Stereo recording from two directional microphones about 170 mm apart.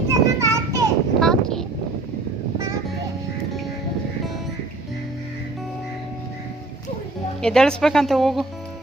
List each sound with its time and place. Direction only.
0.1 s children playing: 20° right (ahead or behind)
1.2 s a sound: centre (ahead or behind)
7.4 s speech: 5° left (ahead or behind)